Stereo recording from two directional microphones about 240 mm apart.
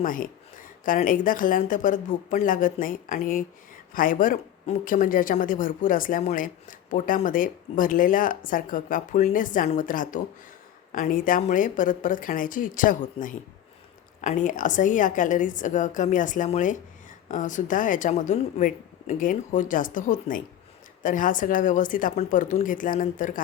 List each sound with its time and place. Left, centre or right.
0.0 s speech: left